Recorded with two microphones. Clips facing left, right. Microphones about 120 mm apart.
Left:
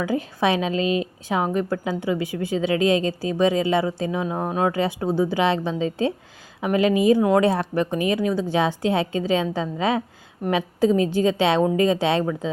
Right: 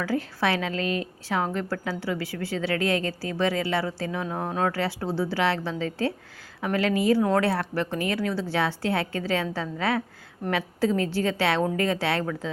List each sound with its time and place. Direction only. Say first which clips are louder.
0.0 s a woman's voice: left 4 dB; 15° left (ahead or behind)